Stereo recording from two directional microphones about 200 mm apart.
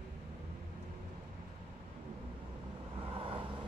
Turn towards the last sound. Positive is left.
turn(degrees=-25)  # may be behind; listen again after turning